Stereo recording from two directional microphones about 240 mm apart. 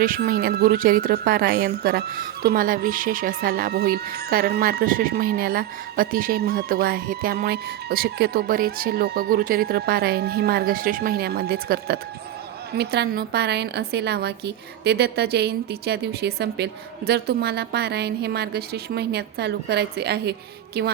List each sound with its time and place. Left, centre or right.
0.0 s a woman's voice: right